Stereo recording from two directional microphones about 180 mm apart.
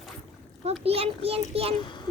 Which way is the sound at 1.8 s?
25° left (ahead or behind).